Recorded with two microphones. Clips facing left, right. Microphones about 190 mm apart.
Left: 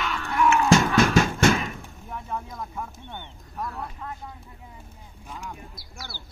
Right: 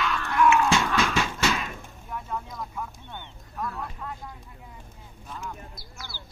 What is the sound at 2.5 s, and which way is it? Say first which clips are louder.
Vehicle: left 1 dB; 25° left (ahead or behind).